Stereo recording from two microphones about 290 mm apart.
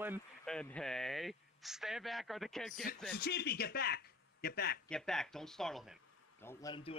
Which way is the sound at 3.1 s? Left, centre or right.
Left.